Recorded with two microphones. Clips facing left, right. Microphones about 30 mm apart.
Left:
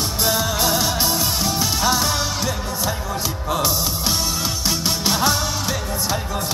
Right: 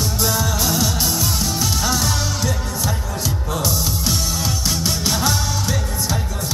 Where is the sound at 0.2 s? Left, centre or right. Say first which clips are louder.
Left 2 dB; centre.